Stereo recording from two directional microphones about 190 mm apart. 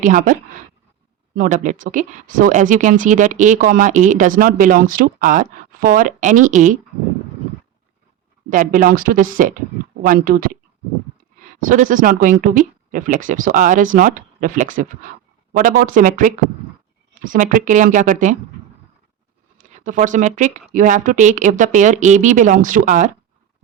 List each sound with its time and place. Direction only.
0.0 s speech: 45° right (ahead or behind)
1.4 s speech: 40° right (ahead or behind)
8.4 s speech: 45° right (ahead or behind)
11.6 s speech: 45° right (ahead or behind)
19.5 s speech: 40° right (ahead or behind)